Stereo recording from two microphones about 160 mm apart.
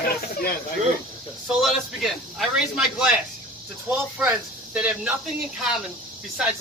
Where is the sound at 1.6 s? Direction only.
Centre (ahead or behind).